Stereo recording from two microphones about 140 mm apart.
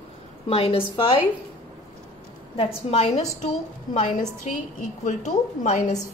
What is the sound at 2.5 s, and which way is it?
Speech, 45° left (ahead or behind).